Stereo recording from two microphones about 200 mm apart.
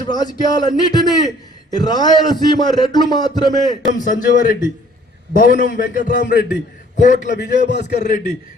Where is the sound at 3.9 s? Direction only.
40° left (ahead or behind).